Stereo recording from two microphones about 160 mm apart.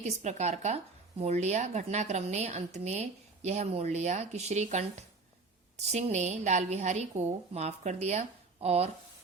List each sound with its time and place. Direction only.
0.0 s a woman's voice: 45° right (ahead or behind)